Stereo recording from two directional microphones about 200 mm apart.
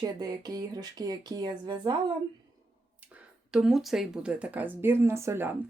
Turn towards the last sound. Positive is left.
turn(degrees=-10)  # may be behind; listen again after turning